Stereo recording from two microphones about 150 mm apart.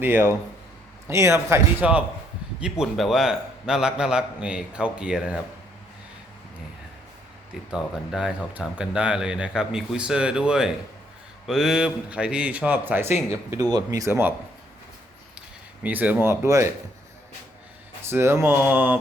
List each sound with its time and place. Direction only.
0.0 s a man's voice: 15° right (ahead or behind)
7.7 s a man's voice: 5° right (ahead or behind)
13.5 s speech: 25° right (ahead or behind)
15.8 s speech: 10° right (ahead or behind)
18.0 s speech: 15° right (ahead or behind)